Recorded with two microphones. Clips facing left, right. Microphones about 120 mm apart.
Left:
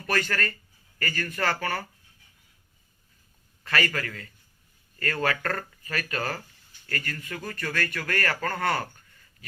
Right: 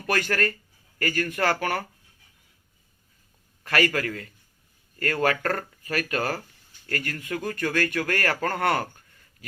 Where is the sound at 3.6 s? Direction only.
45° right (ahead or behind).